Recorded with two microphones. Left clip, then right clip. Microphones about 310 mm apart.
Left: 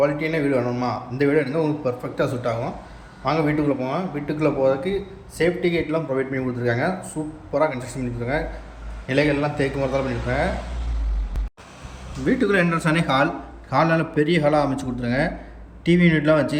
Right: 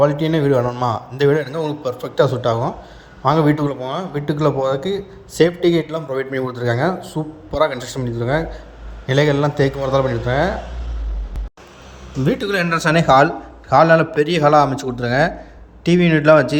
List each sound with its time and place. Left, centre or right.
0.0 s a man's voice: right
12.2 s a man's voice: right